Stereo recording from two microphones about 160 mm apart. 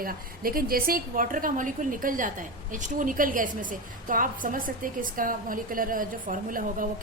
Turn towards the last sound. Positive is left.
turn(degrees=-55)  # may be behind; listen again after turning